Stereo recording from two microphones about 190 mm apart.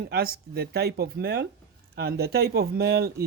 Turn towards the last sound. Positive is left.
turn(degrees=-55)  # may be behind; listen again after turning